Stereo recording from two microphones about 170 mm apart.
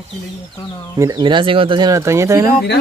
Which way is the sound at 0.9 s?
20° right (ahead or behind).